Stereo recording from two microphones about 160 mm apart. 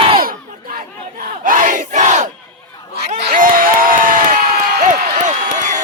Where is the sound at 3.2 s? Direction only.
60° right (ahead or behind).